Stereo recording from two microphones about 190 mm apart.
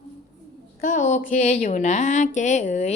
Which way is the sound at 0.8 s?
40° left (ahead or behind).